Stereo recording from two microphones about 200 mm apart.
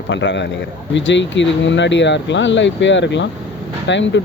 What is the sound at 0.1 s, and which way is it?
Speech, 65° left (ahead or behind).